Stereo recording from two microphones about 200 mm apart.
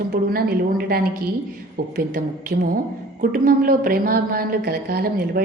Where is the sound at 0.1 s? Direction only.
50° right (ahead or behind).